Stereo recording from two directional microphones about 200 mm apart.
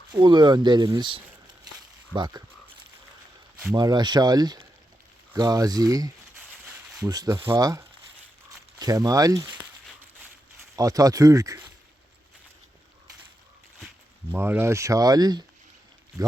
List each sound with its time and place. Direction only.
0.2 s speech: 20° right (ahead or behind)
3.7 s speech: 20° right (ahead or behind)
10.8 s speech: 15° right (ahead or behind)
13.7 s speech: 5° right (ahead or behind)